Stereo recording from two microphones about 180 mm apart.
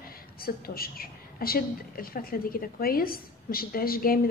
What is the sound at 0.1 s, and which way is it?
A woman's voice, 55° left (ahead or behind).